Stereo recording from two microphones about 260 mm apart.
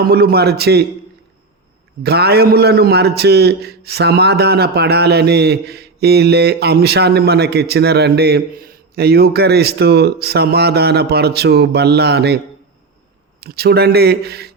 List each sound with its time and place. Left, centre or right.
0.0 s a man's voice: right
2.0 s a man's voice: right
13.4 s a man's voice: right